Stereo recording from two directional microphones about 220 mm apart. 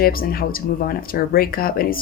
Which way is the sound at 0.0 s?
40° left (ahead or behind).